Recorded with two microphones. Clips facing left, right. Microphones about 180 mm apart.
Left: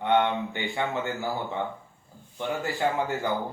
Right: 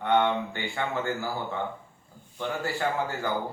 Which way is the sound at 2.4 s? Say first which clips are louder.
Left 2 dB; 20° left (ahead or behind).